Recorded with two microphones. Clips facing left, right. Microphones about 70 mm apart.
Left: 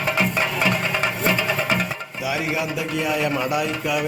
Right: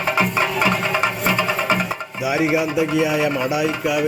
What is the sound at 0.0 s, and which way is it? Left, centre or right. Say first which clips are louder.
Music: right 3 dB; centre.